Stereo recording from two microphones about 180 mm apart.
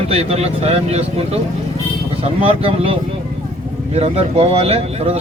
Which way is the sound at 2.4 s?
30° right (ahead or behind).